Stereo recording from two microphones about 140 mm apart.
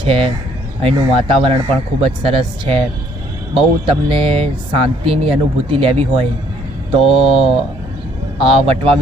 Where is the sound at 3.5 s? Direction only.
40° right (ahead or behind).